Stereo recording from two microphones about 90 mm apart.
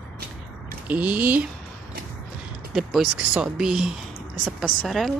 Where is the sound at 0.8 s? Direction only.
15° right (ahead or behind).